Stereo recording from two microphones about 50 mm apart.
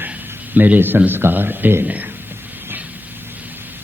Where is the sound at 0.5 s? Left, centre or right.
Right.